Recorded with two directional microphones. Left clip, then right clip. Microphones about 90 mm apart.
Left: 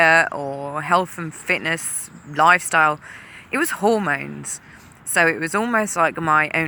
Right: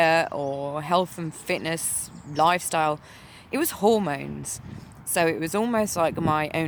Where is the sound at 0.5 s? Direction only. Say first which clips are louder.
Left 5 dB; 35° right (ahead or behind).